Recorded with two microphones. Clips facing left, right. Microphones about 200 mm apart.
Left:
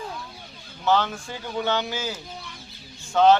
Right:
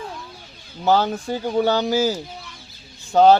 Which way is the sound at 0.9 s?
40° right (ahead or behind).